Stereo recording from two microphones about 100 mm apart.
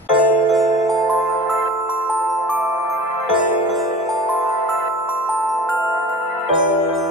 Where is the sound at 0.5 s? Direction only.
Centre (ahead or behind).